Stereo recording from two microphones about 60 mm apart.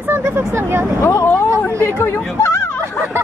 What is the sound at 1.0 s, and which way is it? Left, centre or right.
Vehicle, left.